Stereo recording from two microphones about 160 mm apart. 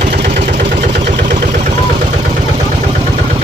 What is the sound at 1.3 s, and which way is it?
Vehicle, 50° right (ahead or behind).